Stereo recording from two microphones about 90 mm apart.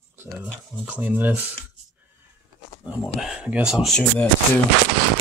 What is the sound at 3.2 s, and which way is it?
Speech, 10° right (ahead or behind).